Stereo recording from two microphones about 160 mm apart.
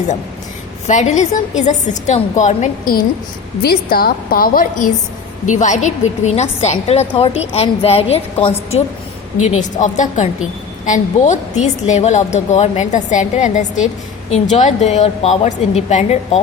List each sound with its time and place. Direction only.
0.9 s a woman's voice: 45° left (ahead or behind)
3.6 s a woman's voice: 75° left (ahead or behind)
5.5 s a woman's voice: 50° left (ahead or behind)
9.4 s a woman's voice: 50° left (ahead or behind)